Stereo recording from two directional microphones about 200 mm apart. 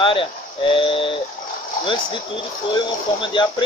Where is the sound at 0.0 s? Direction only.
25° left (ahead or behind).